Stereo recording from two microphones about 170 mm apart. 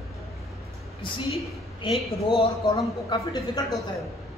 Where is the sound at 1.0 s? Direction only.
30° left (ahead or behind).